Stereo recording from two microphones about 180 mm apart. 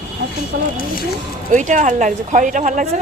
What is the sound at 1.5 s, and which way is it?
Speech, 45° right (ahead or behind).